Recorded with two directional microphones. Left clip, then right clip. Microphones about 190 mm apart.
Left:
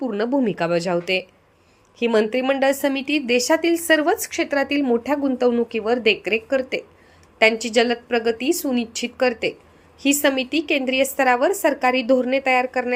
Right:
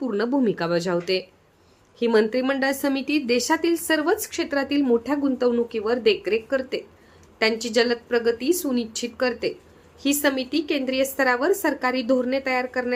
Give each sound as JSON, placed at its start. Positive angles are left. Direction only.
{"t": 0.0, "sound": "a woman's voice", "side_deg": 10}